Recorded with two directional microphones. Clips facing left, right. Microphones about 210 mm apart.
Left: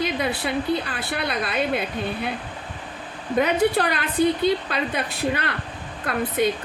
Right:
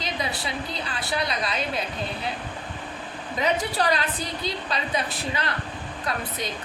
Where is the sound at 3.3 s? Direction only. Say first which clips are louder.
Left 6 dB; 55° left (ahead or behind).